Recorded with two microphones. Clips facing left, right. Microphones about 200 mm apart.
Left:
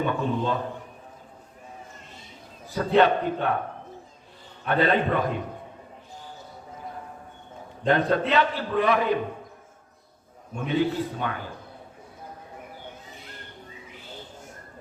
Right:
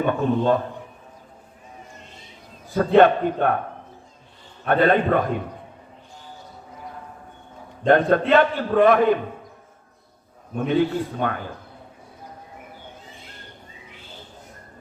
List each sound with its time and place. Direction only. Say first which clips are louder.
0.0 s speech: right 5 dB; 50° right (ahead or behind)
2.7 s speech: right 5 dB; 50° right (ahead or behind)
4.6 s speech: right 4 dB; 50° right (ahead or behind)
7.9 s speech: right 5 dB; 50° right (ahead or behind)
10.5 s speech: right 4 dB; 50° right (ahead or behind)